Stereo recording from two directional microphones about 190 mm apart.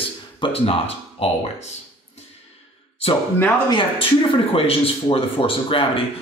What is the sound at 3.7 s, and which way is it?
A man's voice, 25° left (ahead or behind).